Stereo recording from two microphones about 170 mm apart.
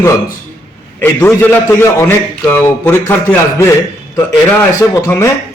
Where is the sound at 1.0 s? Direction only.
15° left (ahead or behind).